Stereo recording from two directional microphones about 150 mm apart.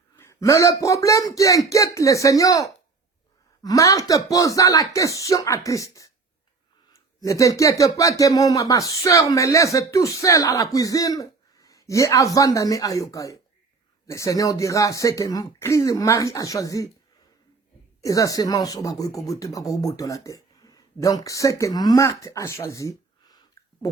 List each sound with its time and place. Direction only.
0.2 s speech: 20° left (ahead or behind)
18.0 s speech: 25° left (ahead or behind)